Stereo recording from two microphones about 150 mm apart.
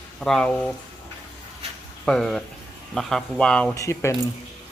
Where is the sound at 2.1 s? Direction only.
5° left (ahead or behind).